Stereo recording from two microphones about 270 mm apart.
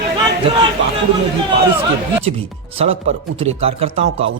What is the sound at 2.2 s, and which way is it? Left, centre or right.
Speech, right.